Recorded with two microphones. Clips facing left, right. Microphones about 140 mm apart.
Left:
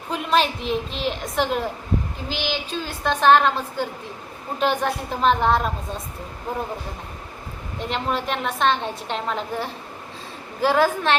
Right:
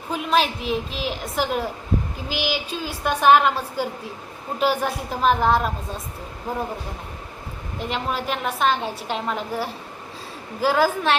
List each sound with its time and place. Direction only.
0.1 s a woman's voice: centre (ahead or behind)
7.8 s a woman's voice: 5° right (ahead or behind)